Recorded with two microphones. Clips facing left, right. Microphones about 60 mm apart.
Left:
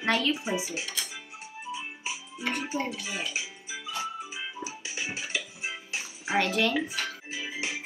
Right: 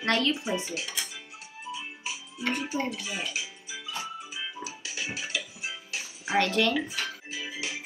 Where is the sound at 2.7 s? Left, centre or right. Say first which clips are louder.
Right 1 dB; centre.